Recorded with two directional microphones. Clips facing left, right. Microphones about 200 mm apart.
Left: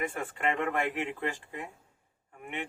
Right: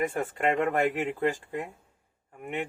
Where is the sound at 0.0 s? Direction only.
40° right (ahead or behind).